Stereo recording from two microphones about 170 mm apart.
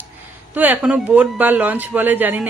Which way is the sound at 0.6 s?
10° right (ahead or behind).